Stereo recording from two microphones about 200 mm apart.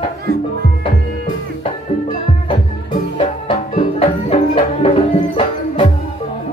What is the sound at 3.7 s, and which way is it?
Music, 30° left (ahead or behind).